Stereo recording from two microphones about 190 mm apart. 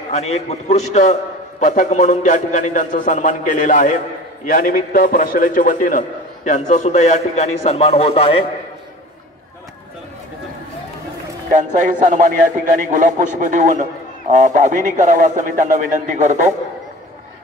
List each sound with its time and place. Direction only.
0.1 s a man's voice: 35° left (ahead or behind)
11.5 s a man's voice: 40° right (ahead or behind)